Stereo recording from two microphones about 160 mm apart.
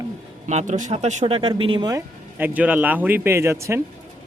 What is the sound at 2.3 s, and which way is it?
Speech, 10° right (ahead or behind).